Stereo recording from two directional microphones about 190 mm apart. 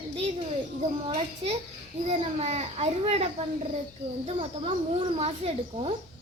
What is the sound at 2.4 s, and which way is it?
Speech, 35° right (ahead or behind).